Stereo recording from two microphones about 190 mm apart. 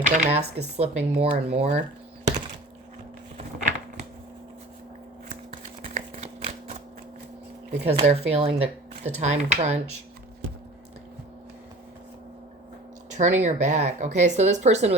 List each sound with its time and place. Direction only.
0.0 s speech: 35° right (ahead or behind)
5.8 s a sound: 35° right (ahead or behind)
7.7 s speech: 35° right (ahead or behind)
13.1 s speech: 40° right (ahead or behind)